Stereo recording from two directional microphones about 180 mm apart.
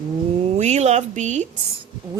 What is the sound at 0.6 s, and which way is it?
Speech, 40° right (ahead or behind).